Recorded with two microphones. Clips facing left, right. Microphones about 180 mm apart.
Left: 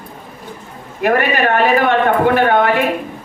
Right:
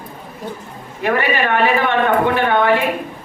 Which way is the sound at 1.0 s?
50° left (ahead or behind).